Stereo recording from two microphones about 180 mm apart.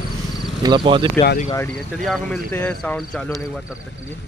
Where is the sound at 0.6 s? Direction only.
25° right (ahead or behind).